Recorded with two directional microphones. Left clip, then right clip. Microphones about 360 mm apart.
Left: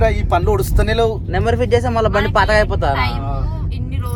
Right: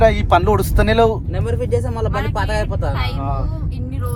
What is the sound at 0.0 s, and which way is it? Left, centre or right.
Speech, right.